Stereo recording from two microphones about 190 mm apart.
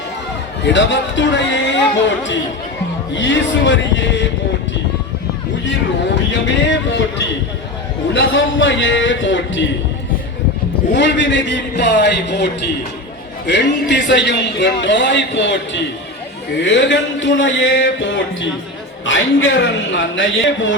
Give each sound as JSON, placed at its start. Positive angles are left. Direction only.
{"t": 0.6, "sound": "speech", "side_deg": 75}
{"t": 8.1, "sound": "speech", "side_deg": 80}
{"t": 10.9, "sound": "a man's voice", "side_deg": 70}
{"t": 13.5, "sound": "a man's voice", "side_deg": 65}